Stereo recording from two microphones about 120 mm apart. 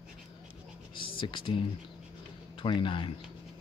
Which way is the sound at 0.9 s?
45° left (ahead or behind).